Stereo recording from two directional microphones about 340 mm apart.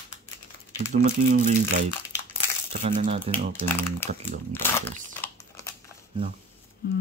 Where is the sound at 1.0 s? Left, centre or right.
Right.